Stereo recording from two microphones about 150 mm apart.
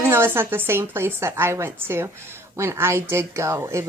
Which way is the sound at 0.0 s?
15° right (ahead or behind).